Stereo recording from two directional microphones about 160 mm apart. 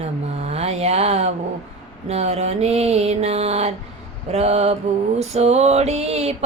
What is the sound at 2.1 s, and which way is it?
Mantra, 40° right (ahead or behind).